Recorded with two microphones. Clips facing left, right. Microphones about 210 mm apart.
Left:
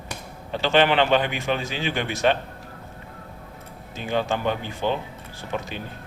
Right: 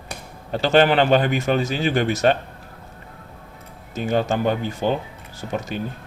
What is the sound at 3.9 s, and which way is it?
Speech, 45° right (ahead or behind).